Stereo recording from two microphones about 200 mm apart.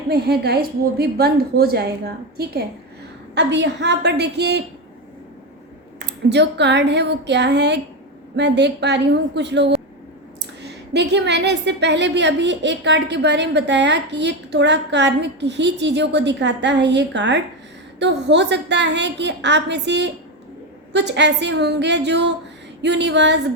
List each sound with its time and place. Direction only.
0.1 s a woman's voice: 55° right (ahead or behind)
6.2 s a woman's voice: 60° right (ahead or behind)